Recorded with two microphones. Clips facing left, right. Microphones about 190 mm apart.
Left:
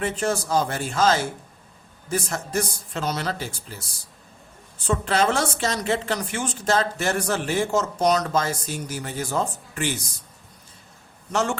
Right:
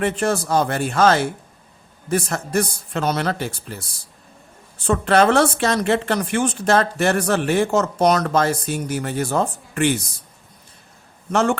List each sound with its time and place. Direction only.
0.0 s a woman's voice: 65° right (ahead or behind)
4.9 s a woman's voice: 60° right (ahead or behind)
11.3 s a woman's voice: 60° right (ahead or behind)